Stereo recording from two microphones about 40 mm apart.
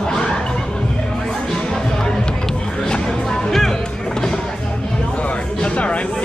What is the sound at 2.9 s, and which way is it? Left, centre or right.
Music, centre.